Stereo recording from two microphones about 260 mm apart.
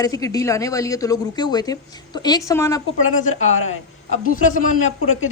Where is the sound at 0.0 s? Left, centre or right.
Centre.